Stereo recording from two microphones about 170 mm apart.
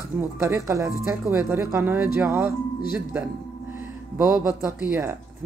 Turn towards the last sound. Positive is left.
turn(degrees=-10)  # may be behind; listen again after turning